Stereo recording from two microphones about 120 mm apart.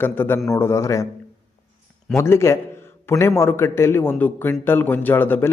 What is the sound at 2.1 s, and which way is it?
A man's voice, 25° left (ahead or behind).